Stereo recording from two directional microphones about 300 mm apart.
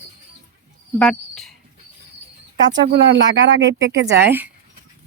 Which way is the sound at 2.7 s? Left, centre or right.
Right.